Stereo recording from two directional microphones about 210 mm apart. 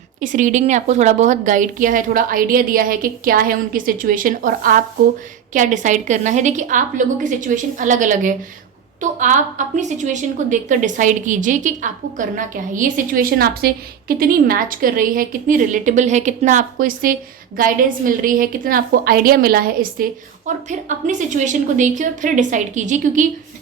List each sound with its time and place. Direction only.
0.2 s a woman's voice: 40° right (ahead or behind)